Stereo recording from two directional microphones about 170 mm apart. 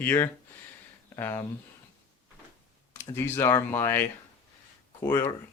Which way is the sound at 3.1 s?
15° left (ahead or behind).